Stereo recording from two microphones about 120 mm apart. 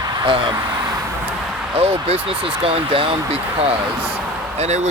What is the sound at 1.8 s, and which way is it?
Speech, 55° right (ahead or behind).